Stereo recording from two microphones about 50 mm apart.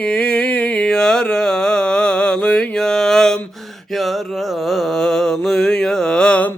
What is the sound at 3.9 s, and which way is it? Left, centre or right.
Mantra, centre.